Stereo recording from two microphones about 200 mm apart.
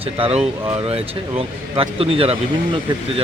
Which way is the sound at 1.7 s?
25° right (ahead or behind).